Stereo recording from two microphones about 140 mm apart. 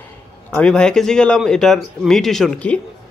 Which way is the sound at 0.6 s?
5° left (ahead or behind).